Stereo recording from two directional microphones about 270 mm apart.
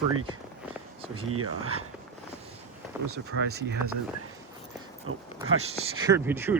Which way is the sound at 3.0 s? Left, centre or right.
Right.